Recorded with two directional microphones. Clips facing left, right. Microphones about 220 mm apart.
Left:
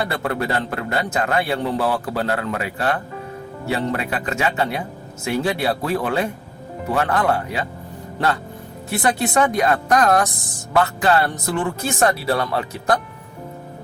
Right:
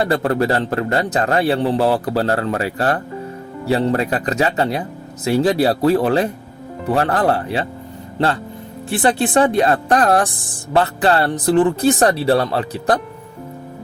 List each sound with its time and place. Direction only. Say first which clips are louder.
0.0 s a man's voice: right 6 dB; 35° right (ahead or behind)
8.9 s a man's voice: right 4 dB; 30° right (ahead or behind)